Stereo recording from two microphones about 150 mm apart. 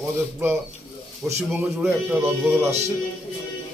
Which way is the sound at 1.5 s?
10° right (ahead or behind).